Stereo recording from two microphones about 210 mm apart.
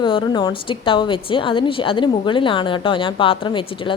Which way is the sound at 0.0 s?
20° left (ahead or behind).